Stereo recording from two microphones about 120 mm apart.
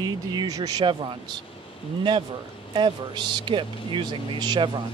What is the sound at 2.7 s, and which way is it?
Speech, 40° right (ahead or behind).